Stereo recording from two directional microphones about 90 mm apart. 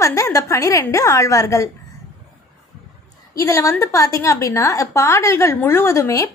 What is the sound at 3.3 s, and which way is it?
A woman's voice, 35° left (ahead or behind).